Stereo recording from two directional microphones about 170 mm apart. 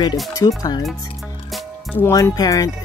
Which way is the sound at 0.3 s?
20° left (ahead or behind).